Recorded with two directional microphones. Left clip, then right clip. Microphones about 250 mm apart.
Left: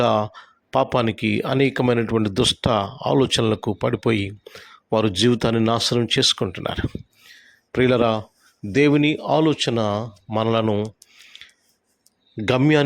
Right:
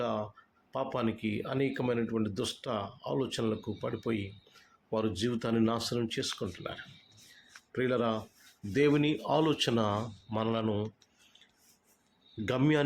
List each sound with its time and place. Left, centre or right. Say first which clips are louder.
0.0 s speech: left 15 dB; left
12.5 s speech: left 11 dB; left